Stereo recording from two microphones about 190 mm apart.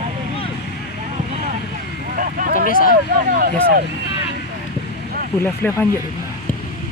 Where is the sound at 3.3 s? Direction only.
50° right (ahead or behind).